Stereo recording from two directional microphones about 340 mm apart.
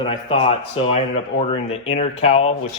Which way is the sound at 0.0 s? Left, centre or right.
Centre.